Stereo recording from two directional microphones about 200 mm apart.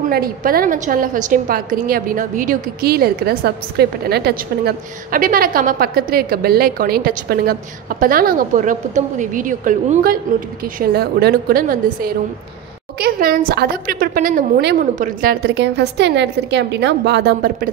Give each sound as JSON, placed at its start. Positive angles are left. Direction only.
{"t": 0.1, "sound": "a woman's voice", "side_deg": -45}
{"t": 15.4, "sound": "a woman's voice", "side_deg": -60}